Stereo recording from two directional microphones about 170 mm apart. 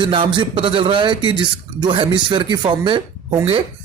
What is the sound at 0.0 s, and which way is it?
A man's voice, 30° right (ahead or behind).